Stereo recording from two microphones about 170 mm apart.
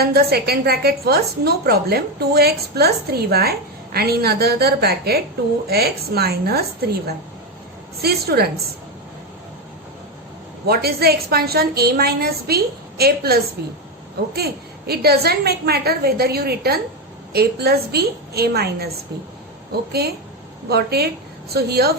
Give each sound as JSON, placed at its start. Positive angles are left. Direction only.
{"t": 0.0, "sound": "a woman's voice", "side_deg": -65}
{"t": 8.0, "sound": "a woman's voice", "side_deg": -70}
{"t": 10.7, "sound": "a woman's voice", "side_deg": -65}
{"t": 20.7, "sound": "a woman's voice", "side_deg": -70}